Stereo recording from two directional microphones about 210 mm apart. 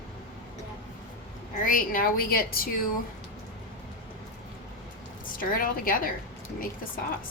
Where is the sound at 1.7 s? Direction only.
40° left (ahead or behind).